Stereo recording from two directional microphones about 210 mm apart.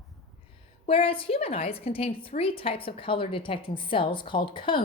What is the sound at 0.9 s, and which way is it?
A woman's voice, 25° left (ahead or behind).